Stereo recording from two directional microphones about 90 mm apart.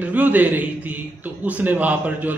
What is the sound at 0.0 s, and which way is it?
A man's voice, 15° right (ahead or behind).